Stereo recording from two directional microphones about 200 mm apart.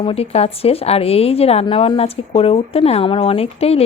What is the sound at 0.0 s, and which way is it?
A woman's voice, 30° left (ahead or behind).